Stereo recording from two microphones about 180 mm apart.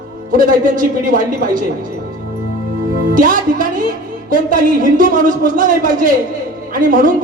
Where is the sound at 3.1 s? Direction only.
50° right (ahead or behind).